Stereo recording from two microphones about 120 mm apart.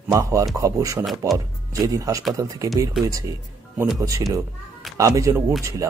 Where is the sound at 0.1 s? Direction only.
30° right (ahead or behind).